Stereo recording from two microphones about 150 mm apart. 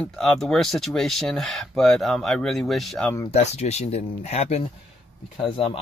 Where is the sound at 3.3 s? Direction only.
45° left (ahead or behind).